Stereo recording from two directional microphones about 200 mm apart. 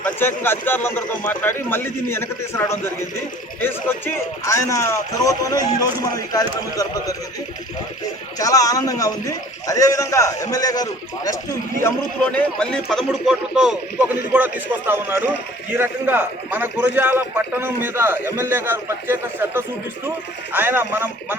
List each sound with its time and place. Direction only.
0.0 s speech: 10° left (ahead or behind)
8.4 s speech: 15° left (ahead or behind)
12.4 s a man's voice: 5° left (ahead or behind)